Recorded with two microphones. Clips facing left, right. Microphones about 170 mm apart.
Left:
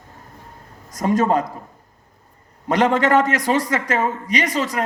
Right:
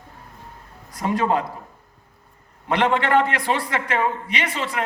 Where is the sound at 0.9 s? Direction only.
45° left (ahead or behind).